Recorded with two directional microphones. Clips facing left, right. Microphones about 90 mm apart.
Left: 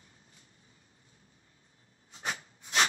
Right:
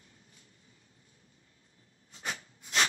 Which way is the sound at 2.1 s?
30° left (ahead or behind).